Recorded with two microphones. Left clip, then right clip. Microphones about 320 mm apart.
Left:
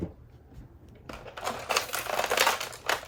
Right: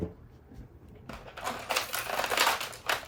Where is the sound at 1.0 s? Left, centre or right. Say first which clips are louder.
Left 2 dB; left.